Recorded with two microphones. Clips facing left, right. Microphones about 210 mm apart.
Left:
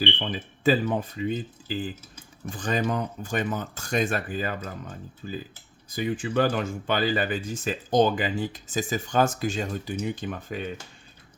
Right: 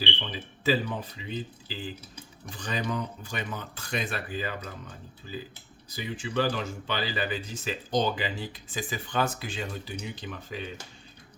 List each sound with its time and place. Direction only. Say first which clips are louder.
0.0 s speech: left 6 dB; 50° left (ahead or behind)